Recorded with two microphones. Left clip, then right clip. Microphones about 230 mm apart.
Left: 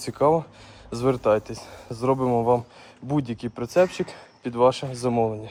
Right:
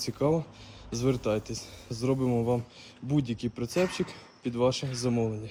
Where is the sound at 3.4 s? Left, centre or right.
Centre.